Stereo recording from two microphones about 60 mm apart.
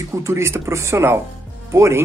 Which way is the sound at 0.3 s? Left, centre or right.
Right.